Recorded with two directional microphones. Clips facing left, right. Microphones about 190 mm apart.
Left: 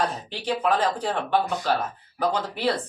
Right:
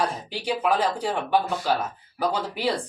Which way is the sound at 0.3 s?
10° right (ahead or behind).